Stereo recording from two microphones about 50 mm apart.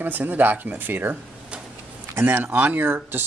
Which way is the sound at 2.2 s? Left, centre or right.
Right.